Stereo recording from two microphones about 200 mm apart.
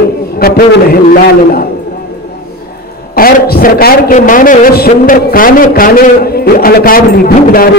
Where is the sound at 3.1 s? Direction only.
50° left (ahead or behind).